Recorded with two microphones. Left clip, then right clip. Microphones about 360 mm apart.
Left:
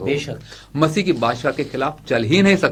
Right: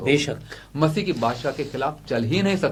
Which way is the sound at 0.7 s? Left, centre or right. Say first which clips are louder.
Left 5 dB; left.